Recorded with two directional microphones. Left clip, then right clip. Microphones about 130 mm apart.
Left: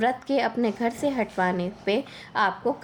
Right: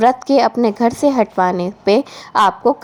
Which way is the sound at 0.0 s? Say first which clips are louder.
Right 11 dB; 45° right (ahead or behind).